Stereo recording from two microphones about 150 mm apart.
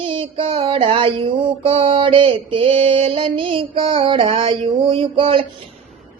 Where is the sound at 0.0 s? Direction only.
35° right (ahead or behind).